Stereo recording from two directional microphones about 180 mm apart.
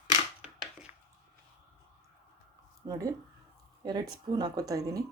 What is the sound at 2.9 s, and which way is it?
Speech, 20° right (ahead or behind).